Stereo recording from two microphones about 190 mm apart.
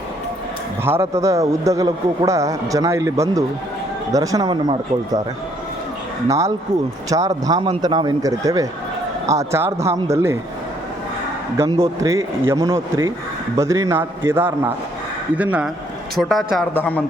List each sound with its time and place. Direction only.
0.9 s a man's voice: 15° right (ahead or behind)
6.2 s a man's voice: 15° right (ahead or behind)
11.5 s a man's voice: 15° right (ahead or behind); by 17.0 s 10° left (ahead or behind)